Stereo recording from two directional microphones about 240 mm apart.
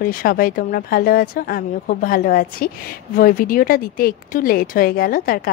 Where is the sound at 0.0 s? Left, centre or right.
Left.